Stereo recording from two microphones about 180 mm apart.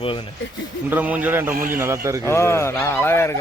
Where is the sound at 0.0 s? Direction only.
30° left (ahead or behind).